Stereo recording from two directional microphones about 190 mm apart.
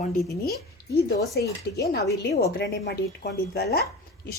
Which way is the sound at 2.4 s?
60° left (ahead or behind).